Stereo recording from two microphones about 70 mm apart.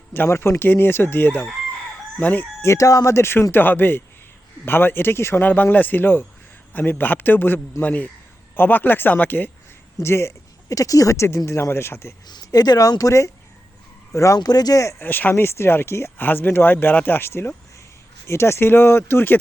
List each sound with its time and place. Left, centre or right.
0.1 s speech: left
2.6 s speech: left
10.0 s speech: left
12.3 s speech: left
14.3 s speech: left
15.0 s speech: left
15.4 s speech: left
16.1 s speech: left